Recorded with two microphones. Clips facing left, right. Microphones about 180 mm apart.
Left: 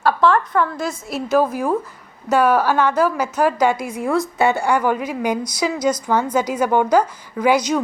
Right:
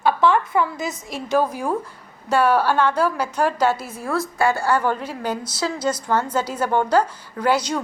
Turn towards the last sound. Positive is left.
turn(degrees=10)  # may be behind; listen again after turning